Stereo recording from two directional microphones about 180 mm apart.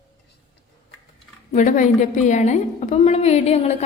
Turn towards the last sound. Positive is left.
turn(degrees=35)  # may be behind; listen again after turning